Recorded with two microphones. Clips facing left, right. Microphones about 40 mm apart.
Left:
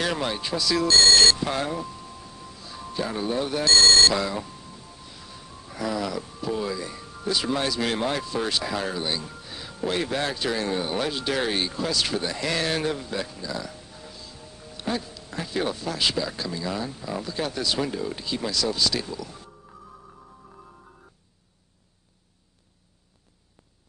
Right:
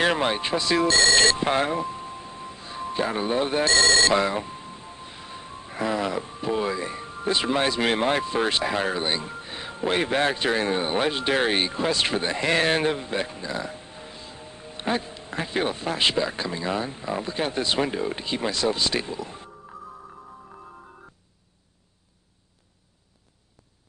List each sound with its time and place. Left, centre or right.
0.0 s speech: right